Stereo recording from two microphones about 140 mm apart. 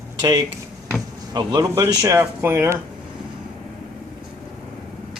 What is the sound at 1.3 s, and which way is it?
Speech, 30° right (ahead or behind).